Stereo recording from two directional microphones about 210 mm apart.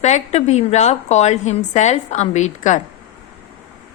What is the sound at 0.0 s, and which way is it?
A woman's voice, 35° left (ahead or behind).